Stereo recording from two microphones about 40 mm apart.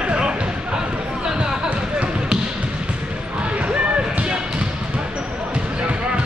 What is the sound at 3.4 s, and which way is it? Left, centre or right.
Basketball bounce, right.